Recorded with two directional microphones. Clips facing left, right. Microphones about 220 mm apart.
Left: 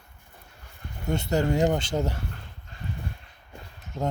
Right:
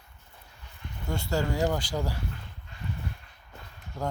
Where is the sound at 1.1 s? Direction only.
20° left (ahead or behind).